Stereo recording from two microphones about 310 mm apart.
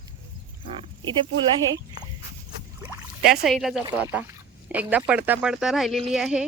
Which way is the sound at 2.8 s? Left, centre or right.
Centre.